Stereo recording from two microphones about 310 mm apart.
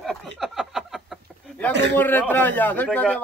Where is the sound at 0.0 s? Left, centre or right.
Centre.